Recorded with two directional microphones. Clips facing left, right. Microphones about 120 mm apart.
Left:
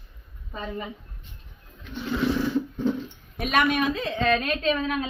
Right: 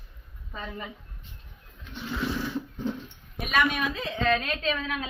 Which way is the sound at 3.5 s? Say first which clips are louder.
Left 3 dB; 40° left (ahead or behind).